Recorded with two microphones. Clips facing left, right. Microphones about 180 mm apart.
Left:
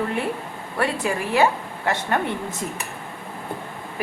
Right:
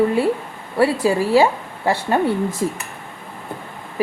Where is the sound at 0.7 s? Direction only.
25° right (ahead or behind).